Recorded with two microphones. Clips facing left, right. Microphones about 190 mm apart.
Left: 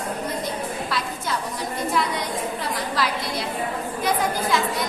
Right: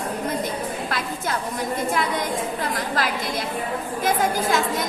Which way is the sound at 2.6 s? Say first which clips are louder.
Right 1 dB; 50° right (ahead or behind).